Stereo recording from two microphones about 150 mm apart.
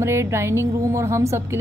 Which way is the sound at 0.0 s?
15° right (ahead or behind).